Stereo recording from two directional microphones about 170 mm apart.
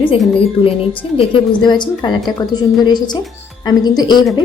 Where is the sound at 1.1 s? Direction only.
30° left (ahead or behind).